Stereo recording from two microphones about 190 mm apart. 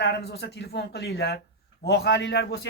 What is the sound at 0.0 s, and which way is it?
A man's voice, 60° left (ahead or behind).